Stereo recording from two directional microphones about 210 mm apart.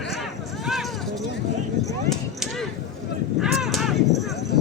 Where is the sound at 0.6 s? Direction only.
Centre (ahead or behind).